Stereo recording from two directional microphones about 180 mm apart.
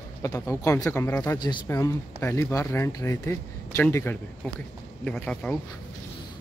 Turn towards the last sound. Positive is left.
turn(degrees=5)  # may be behind; listen again after turning